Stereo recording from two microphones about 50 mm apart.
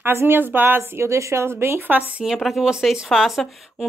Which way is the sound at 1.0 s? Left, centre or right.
Right.